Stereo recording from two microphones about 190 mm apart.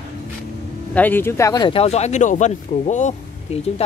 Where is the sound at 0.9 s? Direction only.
10° left (ahead or behind).